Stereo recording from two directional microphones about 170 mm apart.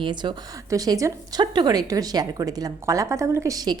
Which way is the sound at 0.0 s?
25° right (ahead or behind).